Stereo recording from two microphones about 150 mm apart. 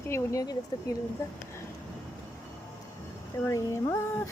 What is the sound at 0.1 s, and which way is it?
Speech, 20° left (ahead or behind).